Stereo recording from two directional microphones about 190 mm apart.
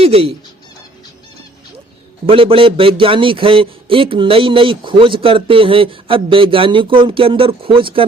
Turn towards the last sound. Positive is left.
turn(degrees=-25)  # may be behind; listen again after turning